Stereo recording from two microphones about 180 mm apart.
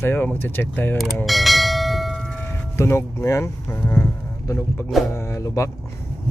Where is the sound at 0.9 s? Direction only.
Centre (ahead or behind).